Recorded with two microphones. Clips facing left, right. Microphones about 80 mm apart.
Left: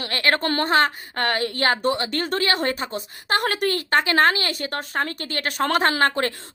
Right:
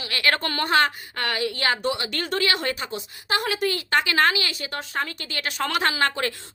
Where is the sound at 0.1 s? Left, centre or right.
Left.